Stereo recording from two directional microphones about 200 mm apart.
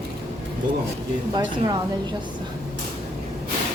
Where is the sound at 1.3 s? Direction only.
20° right (ahead or behind).